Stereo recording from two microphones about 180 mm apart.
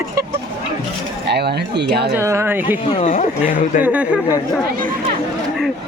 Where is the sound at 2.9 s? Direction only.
45° left (ahead or behind).